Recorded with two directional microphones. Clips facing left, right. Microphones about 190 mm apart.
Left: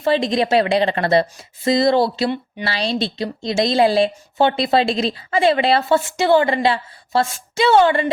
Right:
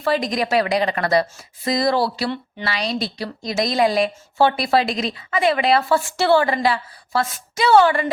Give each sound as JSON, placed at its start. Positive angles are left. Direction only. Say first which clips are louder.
{"t": 0.0, "sound": "a woman's voice", "louder": "left 3 dB", "side_deg": 25}
{"t": 2.6, "sound": "a woman's voice", "louder": "left 2 dB", "side_deg": 30}